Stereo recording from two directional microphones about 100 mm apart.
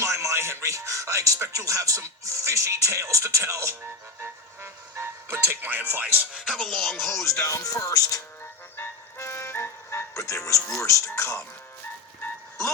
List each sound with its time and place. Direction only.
0.0 s music: 30° right (ahead or behind)
6.5 s music: 5° left (ahead or behind)
7.4 s music: 30° left (ahead or behind)